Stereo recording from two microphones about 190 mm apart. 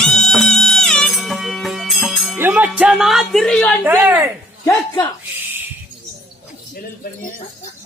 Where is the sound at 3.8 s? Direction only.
10° right (ahead or behind).